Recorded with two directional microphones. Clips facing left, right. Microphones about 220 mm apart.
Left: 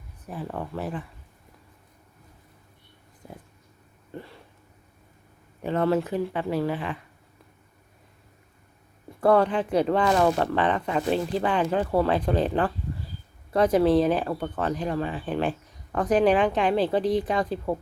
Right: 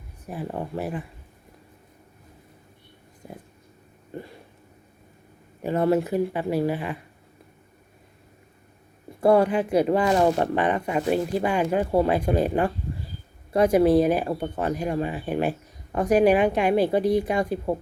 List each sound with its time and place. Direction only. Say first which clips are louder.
0.4 s speech: right 2 dB; 15° right (ahead or behind)
4.1 s a sound: right 3 dB; 15° right (ahead or behind)
5.6 s speech: right 2 dB; 10° right (ahead or behind)
9.2 s speech: right 2 dB; 10° right (ahead or behind)